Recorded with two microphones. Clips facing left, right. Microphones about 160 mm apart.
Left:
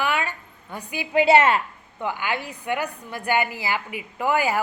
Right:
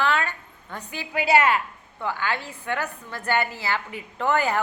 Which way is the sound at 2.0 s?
15° left (ahead or behind).